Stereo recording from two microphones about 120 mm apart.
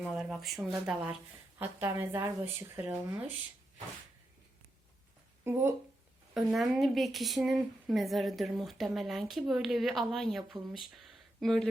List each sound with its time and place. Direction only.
0.0 s speech: centre (ahead or behind)
1.5 s a woman's voice: 15° right (ahead or behind)
5.5 s speech: 20° right (ahead or behind)
6.3 s speech: 5° right (ahead or behind)